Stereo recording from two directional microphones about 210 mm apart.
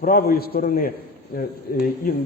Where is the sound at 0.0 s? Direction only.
45° left (ahead or behind).